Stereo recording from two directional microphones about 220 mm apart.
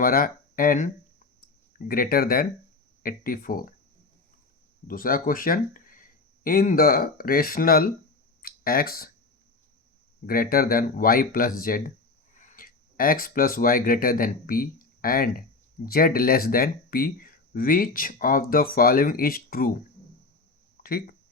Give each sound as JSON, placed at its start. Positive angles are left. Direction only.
{"t": 0.0, "sound": "speech", "side_deg": 40}
{"t": 4.9, "sound": "speech", "side_deg": 40}
{"t": 8.4, "sound": "a sound", "side_deg": 40}
{"t": 10.2, "sound": "speech", "side_deg": 40}
{"t": 20.8, "sound": "speech", "side_deg": 45}